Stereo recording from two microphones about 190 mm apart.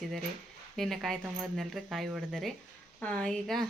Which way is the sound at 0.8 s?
Centre (ahead or behind).